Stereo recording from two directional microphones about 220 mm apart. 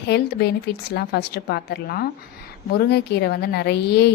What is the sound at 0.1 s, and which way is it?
A woman's voice, 50° left (ahead or behind).